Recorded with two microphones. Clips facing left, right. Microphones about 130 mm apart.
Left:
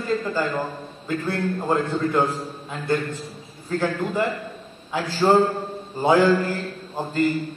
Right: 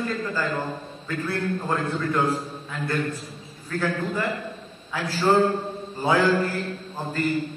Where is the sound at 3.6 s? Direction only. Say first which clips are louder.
Left 2 dB; 30° left (ahead or behind).